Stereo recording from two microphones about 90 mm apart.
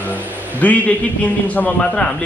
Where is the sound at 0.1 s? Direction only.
15° left (ahead or behind).